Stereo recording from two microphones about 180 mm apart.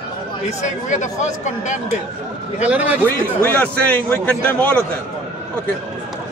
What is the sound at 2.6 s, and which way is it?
Speech, 10° right (ahead or behind).